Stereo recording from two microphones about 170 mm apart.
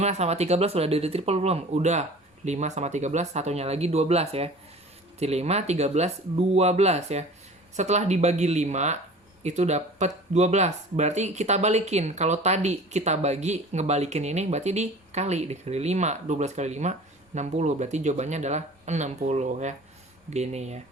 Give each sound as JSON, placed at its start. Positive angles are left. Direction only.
{"t": 0.0, "sound": "speech", "side_deg": -40}